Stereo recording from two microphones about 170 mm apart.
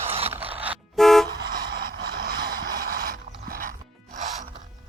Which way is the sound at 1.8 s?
60° right (ahead or behind).